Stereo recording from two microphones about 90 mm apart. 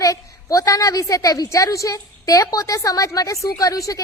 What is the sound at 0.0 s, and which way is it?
A woman's voice, 40° left (ahead or behind).